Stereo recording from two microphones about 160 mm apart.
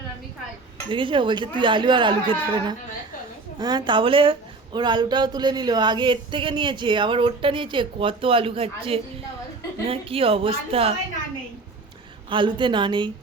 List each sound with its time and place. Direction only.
0.9 s a woman's voice: 30° right (ahead or behind)
12.3 s speech: 30° right (ahead or behind)